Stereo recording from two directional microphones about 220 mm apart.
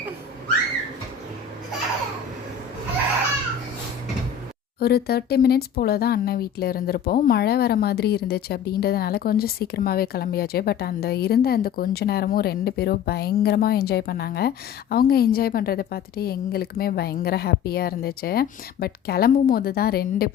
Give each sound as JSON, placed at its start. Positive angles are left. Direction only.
{"t": 4.8, "sound": "speech", "side_deg": 45}